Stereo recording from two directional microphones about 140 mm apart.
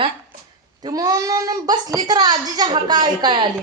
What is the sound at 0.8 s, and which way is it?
A child's voice, 25° right (ahead or behind).